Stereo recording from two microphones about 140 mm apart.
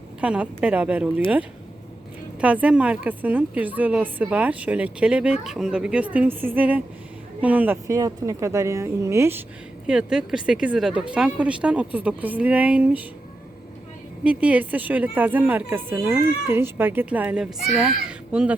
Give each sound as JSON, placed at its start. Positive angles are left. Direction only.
{"t": 0.2, "sound": "a woman's voice", "side_deg": -10}
{"t": 2.4, "sound": "a woman's voice", "side_deg": -10}
{"t": 7.9, "sound": "a woman's voice", "side_deg": -25}
{"t": 9.8, "sound": "a woman's voice", "side_deg": -5}
{"t": 14.3, "sound": "a woman's voice", "side_deg": -10}